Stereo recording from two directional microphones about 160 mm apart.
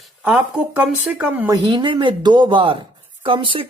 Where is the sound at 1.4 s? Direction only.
30° right (ahead or behind).